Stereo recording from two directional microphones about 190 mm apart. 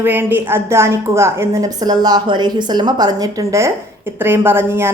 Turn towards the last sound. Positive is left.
turn(degrees=-10)  # may be behind; listen again after turning